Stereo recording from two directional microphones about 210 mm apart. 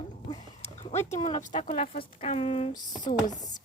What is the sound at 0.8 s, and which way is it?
Speech, 30° left (ahead or behind).